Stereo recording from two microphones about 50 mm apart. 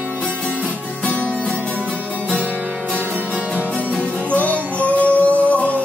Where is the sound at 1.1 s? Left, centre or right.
Left.